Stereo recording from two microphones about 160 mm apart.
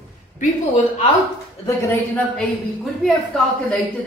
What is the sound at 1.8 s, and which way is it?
A woman's voice, 5° left (ahead or behind).